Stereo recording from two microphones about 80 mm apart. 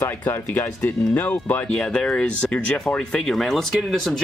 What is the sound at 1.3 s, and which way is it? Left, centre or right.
Speech, left.